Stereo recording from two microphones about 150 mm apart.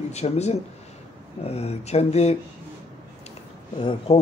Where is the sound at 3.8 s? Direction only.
35° left (ahead or behind).